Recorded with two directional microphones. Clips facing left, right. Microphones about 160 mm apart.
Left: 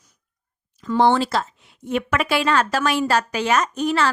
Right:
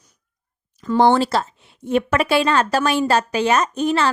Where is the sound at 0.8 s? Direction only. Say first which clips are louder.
Right 2 dB; 40° right (ahead or behind); by 4.0 s 25° right (ahead or behind).